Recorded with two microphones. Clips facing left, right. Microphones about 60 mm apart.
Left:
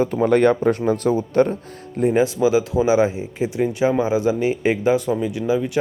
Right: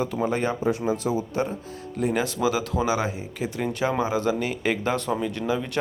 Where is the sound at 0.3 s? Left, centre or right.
Left.